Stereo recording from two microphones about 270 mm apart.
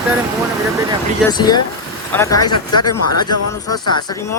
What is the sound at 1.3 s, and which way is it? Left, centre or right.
Speech, centre.